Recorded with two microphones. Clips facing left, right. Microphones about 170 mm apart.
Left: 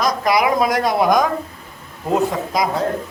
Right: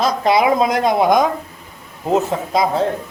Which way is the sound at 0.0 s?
25° right (ahead or behind).